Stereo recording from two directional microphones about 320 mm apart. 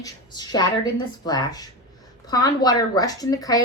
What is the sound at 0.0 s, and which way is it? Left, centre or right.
A woman's voice, centre.